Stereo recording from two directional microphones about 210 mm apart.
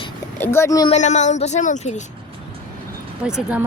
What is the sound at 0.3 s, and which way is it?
Speech, 10° left (ahead or behind).